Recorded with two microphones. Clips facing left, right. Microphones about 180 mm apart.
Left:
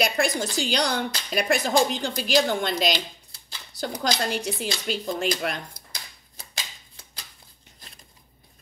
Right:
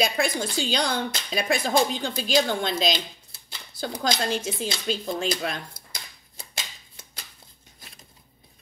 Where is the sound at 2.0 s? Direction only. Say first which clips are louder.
Left 1 dB; 15° left (ahead or behind).